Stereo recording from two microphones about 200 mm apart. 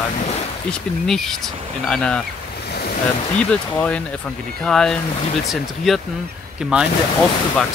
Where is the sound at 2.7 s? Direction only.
50° left (ahead or behind).